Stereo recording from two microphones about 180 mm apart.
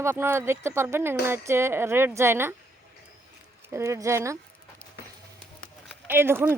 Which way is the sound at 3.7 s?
15° right (ahead or behind).